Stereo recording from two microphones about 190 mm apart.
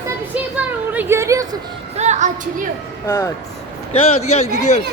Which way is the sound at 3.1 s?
15° left (ahead or behind).